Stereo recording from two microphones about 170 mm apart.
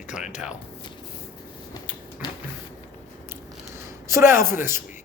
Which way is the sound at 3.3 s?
15° right (ahead or behind).